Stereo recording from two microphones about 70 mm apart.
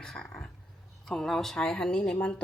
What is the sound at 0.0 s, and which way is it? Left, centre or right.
Speech, centre.